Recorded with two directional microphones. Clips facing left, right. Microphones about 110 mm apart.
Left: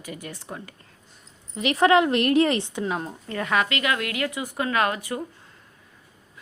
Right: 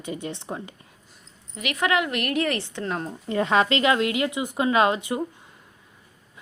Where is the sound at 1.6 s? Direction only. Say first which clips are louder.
Left 6 dB; 30° left (ahead or behind).